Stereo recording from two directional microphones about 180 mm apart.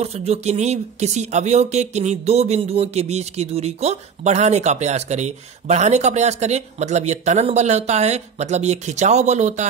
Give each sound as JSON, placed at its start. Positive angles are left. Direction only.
{"t": 0.0, "sound": "speech", "side_deg": -35}